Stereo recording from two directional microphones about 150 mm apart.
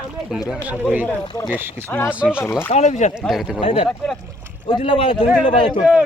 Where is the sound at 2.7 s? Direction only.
50° left (ahead or behind).